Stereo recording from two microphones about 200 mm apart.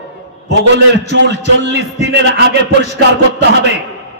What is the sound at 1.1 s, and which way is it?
A man's voice, 60° right (ahead or behind).